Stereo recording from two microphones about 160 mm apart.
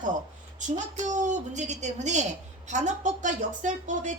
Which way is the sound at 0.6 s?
50° right (ahead or behind).